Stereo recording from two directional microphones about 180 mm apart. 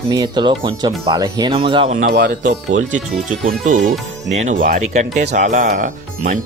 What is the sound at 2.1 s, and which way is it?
Speech, 70° right (ahead or behind).